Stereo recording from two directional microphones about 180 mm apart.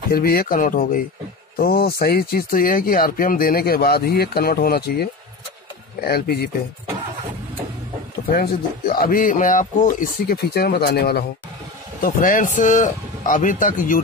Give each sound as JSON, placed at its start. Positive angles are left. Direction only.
{"t": 0.1, "sound": "speech", "side_deg": 55}
{"t": 8.3, "sound": "speech", "side_deg": 55}
{"t": 12.0, "sound": "speech", "side_deg": 50}